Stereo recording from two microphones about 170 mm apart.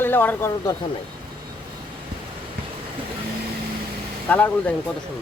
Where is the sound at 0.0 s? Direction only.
10° left (ahead or behind).